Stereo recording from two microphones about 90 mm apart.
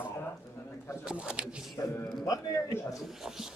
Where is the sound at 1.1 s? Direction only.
10° right (ahead or behind).